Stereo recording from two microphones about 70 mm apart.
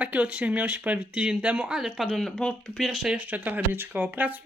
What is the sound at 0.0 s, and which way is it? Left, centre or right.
Speech, right.